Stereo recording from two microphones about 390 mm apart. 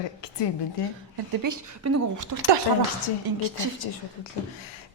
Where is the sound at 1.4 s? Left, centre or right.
Right.